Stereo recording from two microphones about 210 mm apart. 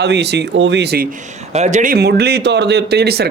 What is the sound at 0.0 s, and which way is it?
Speech, 55° right (ahead or behind).